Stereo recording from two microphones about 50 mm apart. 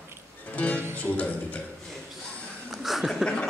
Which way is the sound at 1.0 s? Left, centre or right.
Left.